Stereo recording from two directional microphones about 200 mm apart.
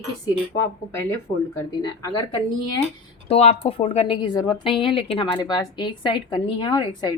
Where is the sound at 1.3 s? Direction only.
25° left (ahead or behind).